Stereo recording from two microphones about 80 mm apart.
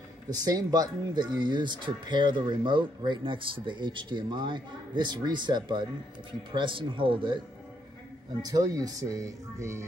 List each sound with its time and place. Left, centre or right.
0.3 s speech: right
6.5 s speech: right
8.4 s speech: right